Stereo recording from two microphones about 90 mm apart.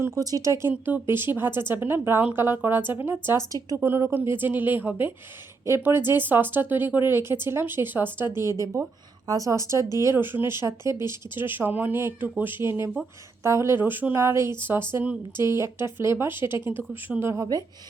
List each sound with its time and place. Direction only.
0.0 s speech: 35° right (ahead or behind)
0.7 s speech: 20° right (ahead or behind)
8.4 s speech: 35° right (ahead or behind)
17.3 s speech: 35° right (ahead or behind)